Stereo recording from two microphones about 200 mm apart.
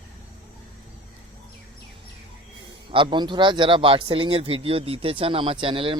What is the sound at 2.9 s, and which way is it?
Speech, 25° right (ahead or behind).